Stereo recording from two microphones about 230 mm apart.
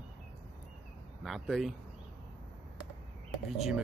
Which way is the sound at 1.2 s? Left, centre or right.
Centre.